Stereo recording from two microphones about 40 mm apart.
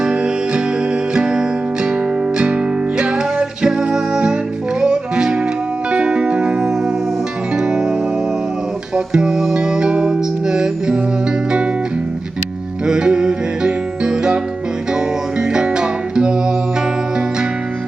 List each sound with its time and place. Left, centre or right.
0.0 s music: right
9.1 s music: centre
12.8 s music: centre
15.4 s music: centre